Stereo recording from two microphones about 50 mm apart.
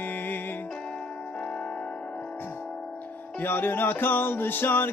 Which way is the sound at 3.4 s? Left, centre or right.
Left.